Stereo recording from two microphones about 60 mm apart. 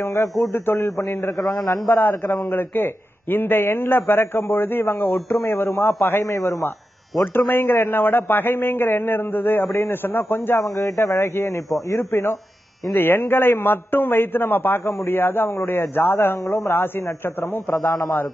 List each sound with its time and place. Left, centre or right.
0.0 s speech: left
0.5 s a man's voice: left
6.2 s a man's voice: left
7.3 s a man's voice: left
10.6 s a man's voice: left
11.9 s a man's voice: left